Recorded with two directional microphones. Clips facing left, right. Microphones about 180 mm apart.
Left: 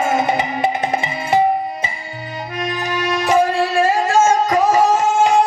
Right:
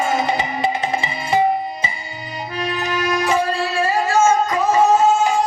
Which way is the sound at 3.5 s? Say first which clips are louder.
Left 4 dB; 50° left (ahead or behind).